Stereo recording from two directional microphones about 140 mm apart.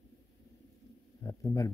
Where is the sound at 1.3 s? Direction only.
25° left (ahead or behind).